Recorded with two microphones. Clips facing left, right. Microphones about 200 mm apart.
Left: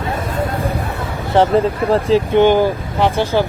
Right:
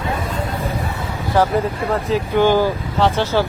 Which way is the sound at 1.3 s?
30° left (ahead or behind).